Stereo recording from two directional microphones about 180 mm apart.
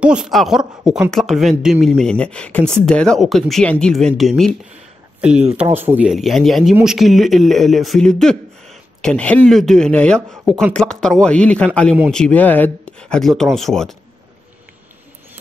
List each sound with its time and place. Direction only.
0.0 s speech: 5° right (ahead or behind)